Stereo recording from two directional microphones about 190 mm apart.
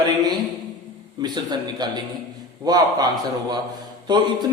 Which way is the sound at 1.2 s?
20° right (ahead or behind).